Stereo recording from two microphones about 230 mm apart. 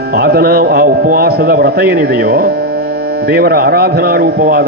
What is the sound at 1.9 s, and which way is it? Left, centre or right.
A man's voice, right.